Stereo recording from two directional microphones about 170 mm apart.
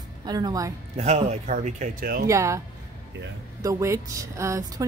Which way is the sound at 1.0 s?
40° right (ahead or behind).